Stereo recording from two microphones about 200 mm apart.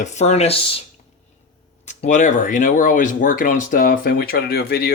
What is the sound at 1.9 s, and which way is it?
Speech, 35° left (ahead or behind).